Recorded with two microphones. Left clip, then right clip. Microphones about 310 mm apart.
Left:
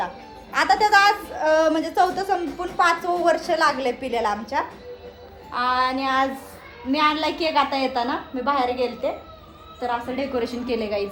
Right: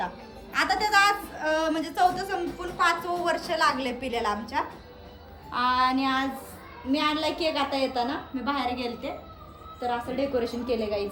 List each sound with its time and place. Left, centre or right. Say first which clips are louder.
0.5 s a woman's voice: left 6 dB; centre
5.5 s child singing: left 2 dB; centre
6.9 s a woman's voice: left 5 dB; centre
8.4 s a woman's voice: left 7 dB; centre
9.8 s a woman's voice: left 3 dB; left